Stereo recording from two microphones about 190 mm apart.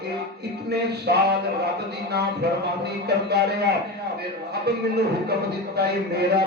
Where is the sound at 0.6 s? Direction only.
60° right (ahead or behind).